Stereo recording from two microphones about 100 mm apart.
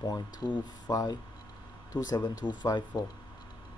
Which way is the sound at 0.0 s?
40° left (ahead or behind).